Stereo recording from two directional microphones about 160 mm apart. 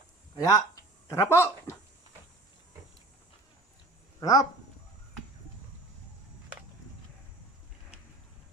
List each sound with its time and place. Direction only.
0.4 s speech: 20° left (ahead or behind)
4.2 s speech: 20° left (ahead or behind)